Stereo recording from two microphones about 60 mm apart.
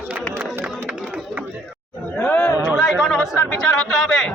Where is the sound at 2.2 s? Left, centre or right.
Left.